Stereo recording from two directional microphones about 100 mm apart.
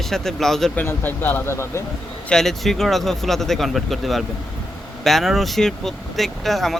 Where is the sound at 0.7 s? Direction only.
20° left (ahead or behind).